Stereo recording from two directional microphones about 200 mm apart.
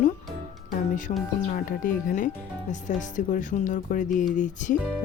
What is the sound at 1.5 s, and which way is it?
Speech, 40° left (ahead or behind).